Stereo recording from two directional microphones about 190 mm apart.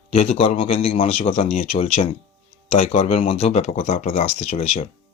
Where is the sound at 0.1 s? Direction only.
30° left (ahead or behind).